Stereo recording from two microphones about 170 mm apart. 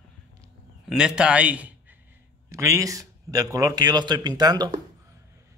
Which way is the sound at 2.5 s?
20° right (ahead or behind).